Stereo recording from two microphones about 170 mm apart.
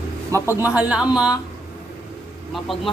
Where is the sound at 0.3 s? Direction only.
20° right (ahead or behind).